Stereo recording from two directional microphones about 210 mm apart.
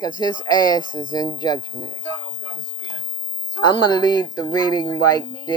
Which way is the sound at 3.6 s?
20° left (ahead or behind).